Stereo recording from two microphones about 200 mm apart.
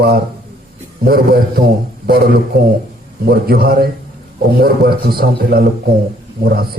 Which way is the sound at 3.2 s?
50° right (ahead or behind).